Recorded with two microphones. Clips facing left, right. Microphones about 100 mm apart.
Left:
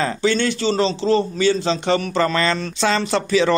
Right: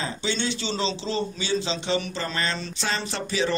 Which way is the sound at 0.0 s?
55° left (ahead or behind).